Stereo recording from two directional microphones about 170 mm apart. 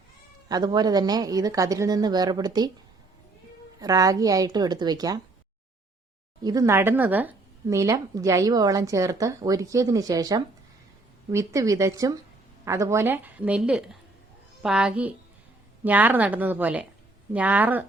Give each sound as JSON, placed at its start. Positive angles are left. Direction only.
{"t": 0.4, "sound": "speech", "side_deg": -25}
{"t": 3.8, "sound": "speech", "side_deg": -20}
{"t": 6.4, "sound": "a woman's voice", "side_deg": -20}